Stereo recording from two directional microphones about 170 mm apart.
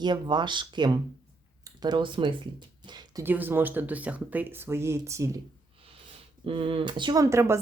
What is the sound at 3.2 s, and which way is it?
Speech, 10° right (ahead or behind).